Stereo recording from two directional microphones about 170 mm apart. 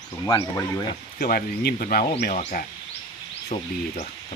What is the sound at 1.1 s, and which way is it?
Speech, 60° left (ahead or behind).